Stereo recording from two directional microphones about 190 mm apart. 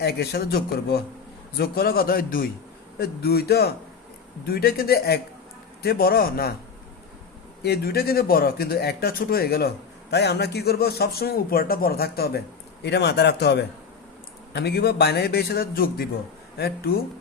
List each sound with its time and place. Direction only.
0.0 s speech: 60° left (ahead or behind)
7.6 s speech: 55° left (ahead or behind)